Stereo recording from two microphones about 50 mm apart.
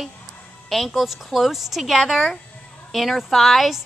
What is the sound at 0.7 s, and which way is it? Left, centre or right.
A woman's voice, centre.